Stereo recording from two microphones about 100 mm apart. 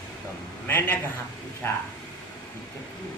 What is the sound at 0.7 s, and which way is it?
Speech, 20° left (ahead or behind).